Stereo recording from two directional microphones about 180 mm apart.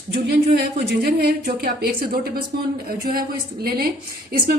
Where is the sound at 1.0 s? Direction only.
55° right (ahead or behind).